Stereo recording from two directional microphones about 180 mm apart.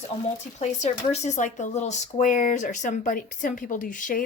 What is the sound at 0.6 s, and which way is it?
Speech, 40° left (ahead or behind).